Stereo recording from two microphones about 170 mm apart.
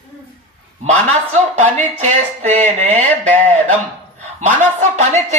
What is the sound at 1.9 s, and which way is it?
Speech, 45° right (ahead or behind).